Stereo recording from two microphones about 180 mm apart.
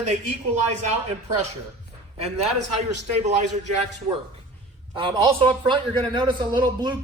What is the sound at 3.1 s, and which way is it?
Speech, 40° right (ahead or behind).